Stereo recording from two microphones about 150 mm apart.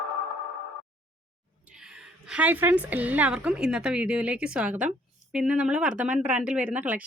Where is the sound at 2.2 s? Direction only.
10° right (ahead or behind).